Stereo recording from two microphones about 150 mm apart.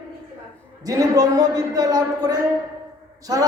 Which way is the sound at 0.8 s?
25° right (ahead or behind).